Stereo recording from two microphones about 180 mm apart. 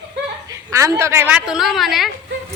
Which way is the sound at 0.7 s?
15° right (ahead or behind).